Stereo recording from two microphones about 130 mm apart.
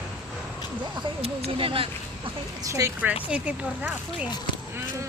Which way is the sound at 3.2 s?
10° right (ahead or behind).